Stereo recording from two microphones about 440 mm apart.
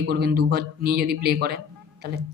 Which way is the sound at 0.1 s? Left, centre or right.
Right.